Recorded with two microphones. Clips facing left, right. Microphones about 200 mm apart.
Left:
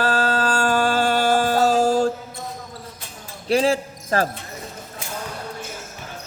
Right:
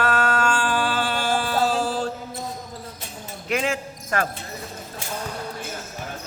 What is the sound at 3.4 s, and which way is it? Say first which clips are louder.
Speech: left 6 dB; 35° left (ahead or behind).